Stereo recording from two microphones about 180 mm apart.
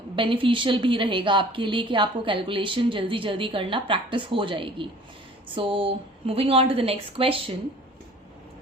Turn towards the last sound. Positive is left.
turn(degrees=-30)  # may be behind; listen again after turning